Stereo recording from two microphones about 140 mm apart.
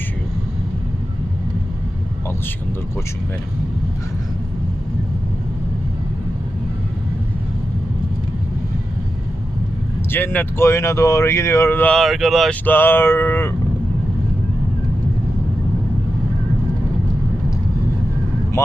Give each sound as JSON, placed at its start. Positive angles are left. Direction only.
{"t": 10.1, "sound": "speech", "side_deg": 15}
{"t": 11.9, "sound": "speech", "side_deg": 0}
{"t": 12.6, "sound": "a sound", "side_deg": 15}